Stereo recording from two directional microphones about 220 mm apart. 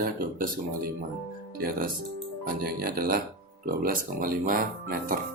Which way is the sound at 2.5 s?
40° right (ahead or behind).